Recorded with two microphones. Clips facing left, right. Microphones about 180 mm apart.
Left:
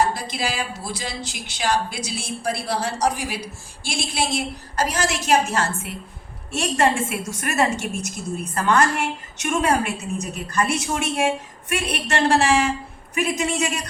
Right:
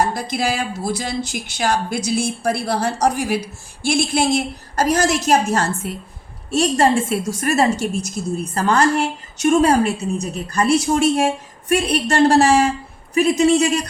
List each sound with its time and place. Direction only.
0.1 s a woman's voice: 45° right (ahead or behind)